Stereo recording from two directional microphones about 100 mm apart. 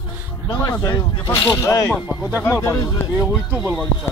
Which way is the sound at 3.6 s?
5° right (ahead or behind).